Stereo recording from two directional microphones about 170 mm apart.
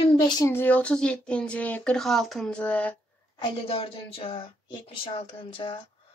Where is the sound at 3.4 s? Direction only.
30° left (ahead or behind).